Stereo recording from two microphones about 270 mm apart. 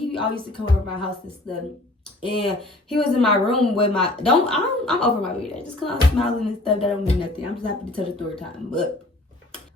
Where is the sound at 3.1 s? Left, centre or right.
Centre.